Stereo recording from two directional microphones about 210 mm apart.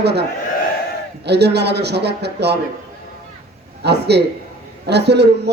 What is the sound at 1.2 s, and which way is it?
Speech, 50° right (ahead or behind).